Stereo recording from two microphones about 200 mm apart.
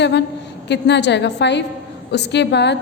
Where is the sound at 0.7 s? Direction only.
60° left (ahead or behind).